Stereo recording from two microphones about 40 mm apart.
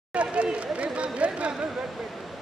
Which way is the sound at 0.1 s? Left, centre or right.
Right.